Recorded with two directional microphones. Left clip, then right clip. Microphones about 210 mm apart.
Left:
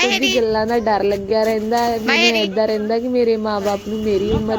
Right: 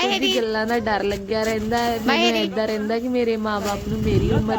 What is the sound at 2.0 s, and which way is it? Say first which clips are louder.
Speech: left 4 dB; 15° right (ahead or behind).